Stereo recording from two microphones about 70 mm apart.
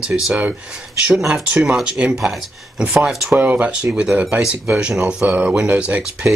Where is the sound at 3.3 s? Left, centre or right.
Right.